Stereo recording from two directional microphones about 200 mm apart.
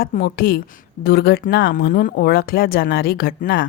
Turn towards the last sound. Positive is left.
turn(degrees=45)  # may be behind; listen again after turning